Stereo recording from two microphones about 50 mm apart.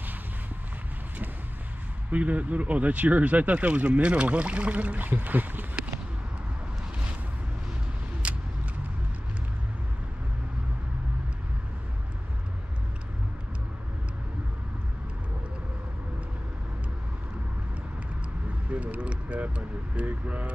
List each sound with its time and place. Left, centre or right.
2.0 s speech: right
8.2 s vehicle: right
18.7 s a sound: right